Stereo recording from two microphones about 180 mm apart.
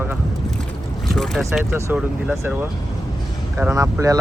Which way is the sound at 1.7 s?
10° right (ahead or behind).